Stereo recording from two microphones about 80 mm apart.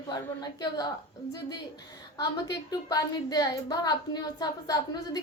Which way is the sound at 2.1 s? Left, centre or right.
Left.